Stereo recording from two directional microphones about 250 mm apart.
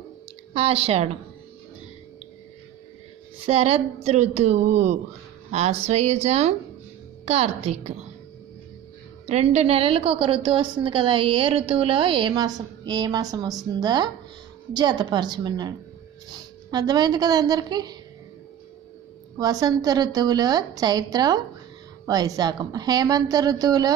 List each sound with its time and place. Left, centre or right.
0.5 s a woman's voice: right
3.3 s a woman's voice: right
9.3 s a woman's voice: right
16.7 s a woman's voice: centre
19.3 s a woman's voice: centre